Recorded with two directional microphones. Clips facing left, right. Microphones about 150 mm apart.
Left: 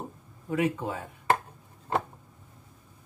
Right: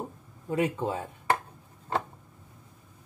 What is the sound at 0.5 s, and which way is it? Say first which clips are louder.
Speech: even; 25° right (ahead or behind).